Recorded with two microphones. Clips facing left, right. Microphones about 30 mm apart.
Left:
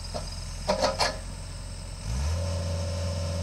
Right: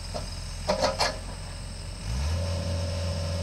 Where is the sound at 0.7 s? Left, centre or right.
Centre.